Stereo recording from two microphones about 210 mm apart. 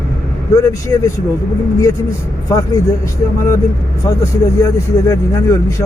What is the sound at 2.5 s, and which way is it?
Speech, 15° left (ahead or behind).